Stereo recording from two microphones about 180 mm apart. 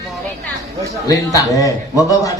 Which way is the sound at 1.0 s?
20° left (ahead or behind).